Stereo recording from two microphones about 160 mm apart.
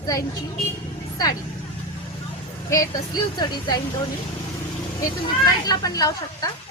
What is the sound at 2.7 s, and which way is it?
Speech, 25° left (ahead or behind).